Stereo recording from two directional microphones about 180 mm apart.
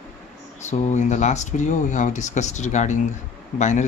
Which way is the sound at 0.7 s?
40° left (ahead or behind).